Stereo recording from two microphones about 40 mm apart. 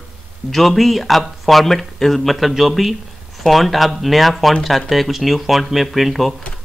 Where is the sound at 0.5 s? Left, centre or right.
Centre.